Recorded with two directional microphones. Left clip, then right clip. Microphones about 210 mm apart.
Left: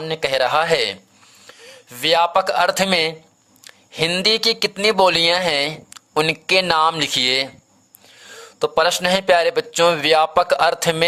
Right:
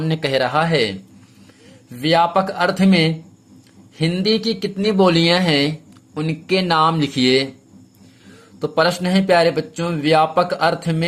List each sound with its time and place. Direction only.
0.0 s a man's voice: 15° left (ahead or behind)
0.3 s speech: 30° left (ahead or behind)
2.0 s speech: 35° left (ahead or behind)
8.5 s speech: 35° left (ahead or behind)